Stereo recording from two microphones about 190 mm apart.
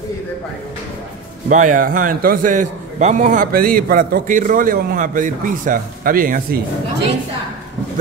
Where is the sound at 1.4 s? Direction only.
40° right (ahead or behind).